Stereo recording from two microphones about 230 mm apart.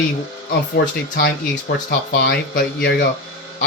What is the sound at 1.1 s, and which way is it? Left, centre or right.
Speech, left.